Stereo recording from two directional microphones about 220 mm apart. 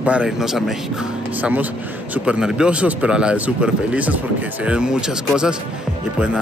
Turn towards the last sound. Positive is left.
turn(degrees=-5)  # may be behind; listen again after turning